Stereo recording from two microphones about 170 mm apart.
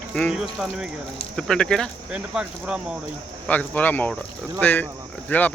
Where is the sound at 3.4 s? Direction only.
10° left (ahead or behind).